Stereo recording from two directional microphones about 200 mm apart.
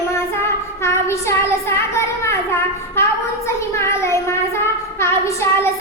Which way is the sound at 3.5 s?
15° left (ahead or behind).